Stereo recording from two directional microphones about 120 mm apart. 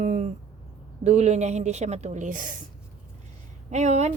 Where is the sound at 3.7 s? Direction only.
75° right (ahead or behind).